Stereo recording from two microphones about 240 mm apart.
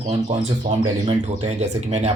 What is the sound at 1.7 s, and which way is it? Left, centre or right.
Speech, right.